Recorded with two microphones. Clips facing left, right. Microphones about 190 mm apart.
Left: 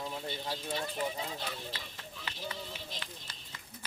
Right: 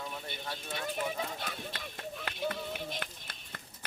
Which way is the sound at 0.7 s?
60° right (ahead or behind).